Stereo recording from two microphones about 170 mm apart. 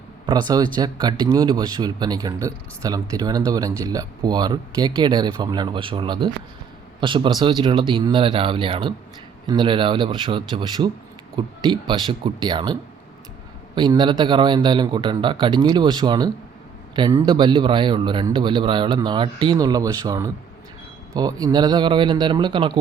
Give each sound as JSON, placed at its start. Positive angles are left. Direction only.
{"t": 0.3, "sound": "speech", "side_deg": -25}
{"t": 13.7, "sound": "speech", "side_deg": -25}